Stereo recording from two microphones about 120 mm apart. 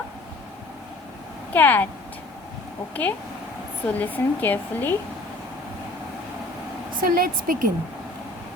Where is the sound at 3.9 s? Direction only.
15° left (ahead or behind).